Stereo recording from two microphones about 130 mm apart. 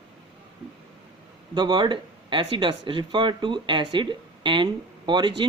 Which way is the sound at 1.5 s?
35° right (ahead or behind).